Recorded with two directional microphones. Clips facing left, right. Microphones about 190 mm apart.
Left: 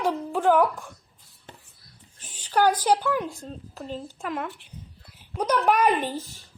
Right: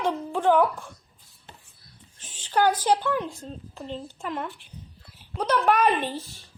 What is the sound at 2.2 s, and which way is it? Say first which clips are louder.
A woman's voice: left 1 dB; 10° left (ahead or behind).